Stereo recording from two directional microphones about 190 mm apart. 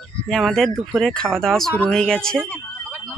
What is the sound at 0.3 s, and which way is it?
Speech, centre (ahead or behind).